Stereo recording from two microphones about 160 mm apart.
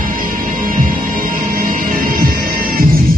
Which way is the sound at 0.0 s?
60° right (ahead or behind).